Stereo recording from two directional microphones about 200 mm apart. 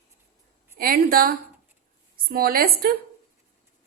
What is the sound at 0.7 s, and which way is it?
A woman's voice, 45° right (ahead or behind).